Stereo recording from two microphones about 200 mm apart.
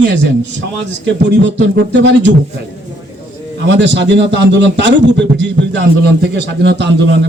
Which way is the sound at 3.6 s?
65° right (ahead or behind).